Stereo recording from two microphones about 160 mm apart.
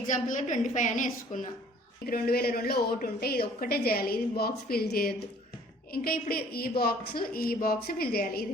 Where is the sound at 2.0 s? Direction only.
70° left (ahead or behind).